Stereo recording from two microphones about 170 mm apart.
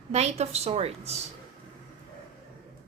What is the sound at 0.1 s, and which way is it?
A woman's voice, 40° right (ahead or behind).